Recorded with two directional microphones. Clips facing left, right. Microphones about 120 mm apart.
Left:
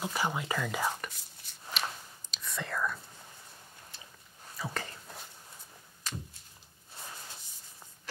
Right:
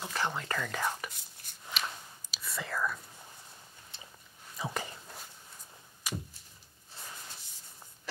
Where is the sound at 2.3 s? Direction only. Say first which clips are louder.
Even; 5° right (ahead or behind).